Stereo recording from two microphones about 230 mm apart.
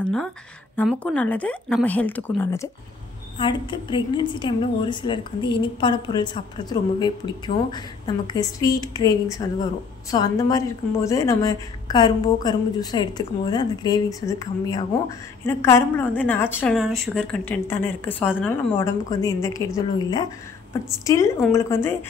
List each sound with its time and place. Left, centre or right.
0.0 s a woman's voice: centre